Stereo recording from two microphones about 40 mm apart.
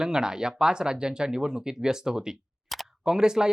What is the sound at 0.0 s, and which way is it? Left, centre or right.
Speech, centre.